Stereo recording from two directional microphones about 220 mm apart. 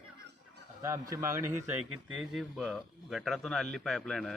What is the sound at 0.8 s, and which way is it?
A man's voice, 15° right (ahead or behind).